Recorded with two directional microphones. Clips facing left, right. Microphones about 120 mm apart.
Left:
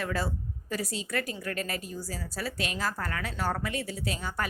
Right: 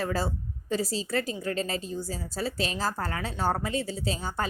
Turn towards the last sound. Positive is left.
turn(degrees=-30)  # may be behind; listen again after turning